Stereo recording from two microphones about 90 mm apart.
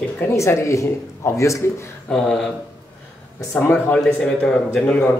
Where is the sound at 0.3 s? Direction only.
30° left (ahead or behind).